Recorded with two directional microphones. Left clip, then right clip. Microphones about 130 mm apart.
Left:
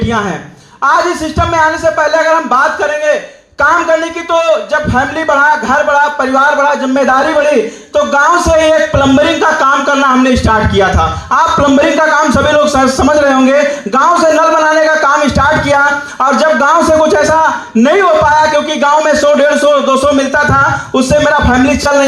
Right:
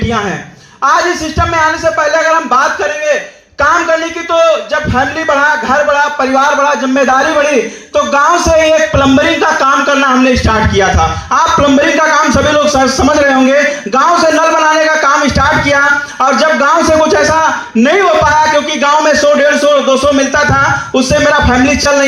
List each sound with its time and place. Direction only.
1.4 s a woman's voice: 40° left (ahead or behind)
4.3 s a man's voice: 40° left (ahead or behind)